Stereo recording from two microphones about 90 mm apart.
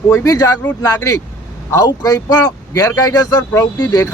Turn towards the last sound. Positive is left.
turn(degrees=40)  # may be behind; listen again after turning